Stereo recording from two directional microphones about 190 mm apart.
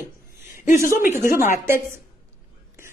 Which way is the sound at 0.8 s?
45° left (ahead or behind).